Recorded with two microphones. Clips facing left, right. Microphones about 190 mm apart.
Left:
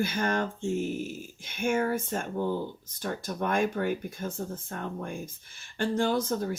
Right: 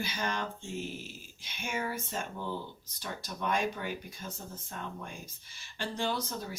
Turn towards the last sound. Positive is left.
turn(degrees=50)  # may be behind; listen again after turning